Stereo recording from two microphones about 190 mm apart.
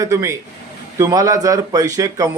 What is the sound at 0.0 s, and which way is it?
Speech, 15° right (ahead or behind).